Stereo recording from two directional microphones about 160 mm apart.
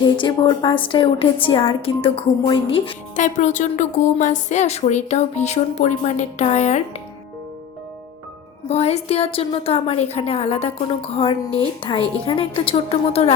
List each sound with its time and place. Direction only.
0.0 s a woman's voice: 30° left (ahead or behind)
3.2 s speech: 50° left (ahead or behind)
8.7 s a woman's voice: 40° left (ahead or behind)